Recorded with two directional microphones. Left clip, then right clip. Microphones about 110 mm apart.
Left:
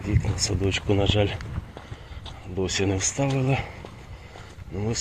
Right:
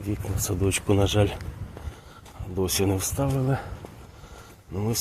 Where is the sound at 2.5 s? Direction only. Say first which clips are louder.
Even; 35° right (ahead or behind).